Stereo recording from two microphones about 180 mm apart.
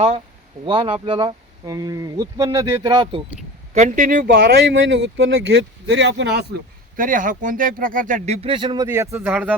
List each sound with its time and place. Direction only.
0.6 s speech: 30° right (ahead or behind)
3.8 s speech: 45° right (ahead or behind)
4.4 s speech: 75° right (ahead or behind)
6.9 s speech: 50° right (ahead or behind); by 9.6 s 10° right (ahead or behind)